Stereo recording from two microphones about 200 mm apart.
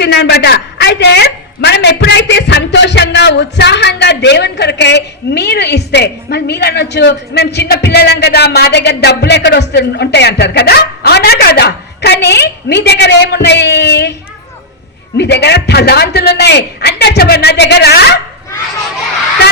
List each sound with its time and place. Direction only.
0.0 s a woman's voice: 55° left (ahead or behind)
15.2 s a woman's voice: 55° left (ahead or behind)